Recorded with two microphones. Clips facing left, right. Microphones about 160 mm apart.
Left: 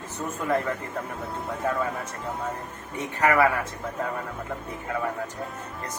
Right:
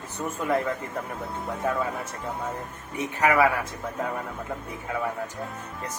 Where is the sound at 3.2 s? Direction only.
10° right (ahead or behind).